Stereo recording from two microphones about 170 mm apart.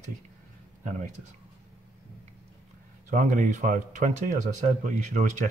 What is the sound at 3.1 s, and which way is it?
Speech, 50° right (ahead or behind).